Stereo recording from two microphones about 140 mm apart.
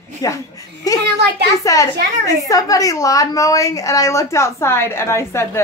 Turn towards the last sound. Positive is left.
turn(degrees=20)  # may be behind; listen again after turning